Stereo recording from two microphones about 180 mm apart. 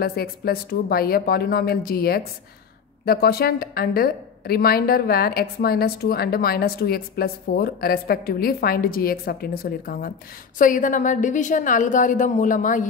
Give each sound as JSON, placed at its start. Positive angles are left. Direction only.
{"t": 0.0, "sound": "a woman's voice", "side_deg": 55}